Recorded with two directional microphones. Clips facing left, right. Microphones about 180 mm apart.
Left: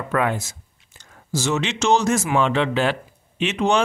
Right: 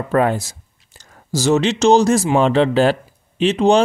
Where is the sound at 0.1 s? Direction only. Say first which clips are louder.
Right 6 dB; 35° right (ahead or behind).